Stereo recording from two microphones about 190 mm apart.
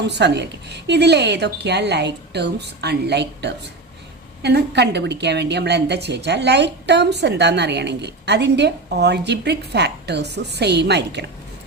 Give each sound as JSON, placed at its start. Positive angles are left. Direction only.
{"t": 0.0, "sound": "a woman's voice", "side_deg": -65}